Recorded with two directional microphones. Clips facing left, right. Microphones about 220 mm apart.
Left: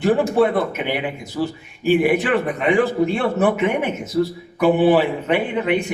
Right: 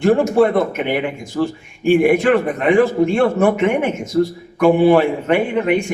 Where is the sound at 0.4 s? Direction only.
45° right (ahead or behind).